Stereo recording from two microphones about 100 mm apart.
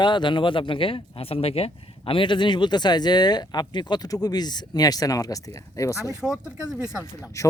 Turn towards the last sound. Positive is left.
turn(degrees=-10)  # may be behind; listen again after turning